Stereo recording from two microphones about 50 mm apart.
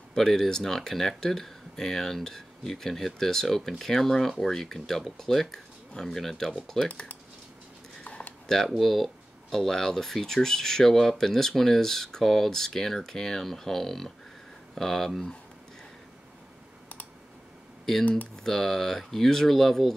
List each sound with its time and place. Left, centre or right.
0.1 s speech: centre
6.9 s speech: left
8.0 s a sound: left
8.6 s speech: centre
18.3 s speech: centre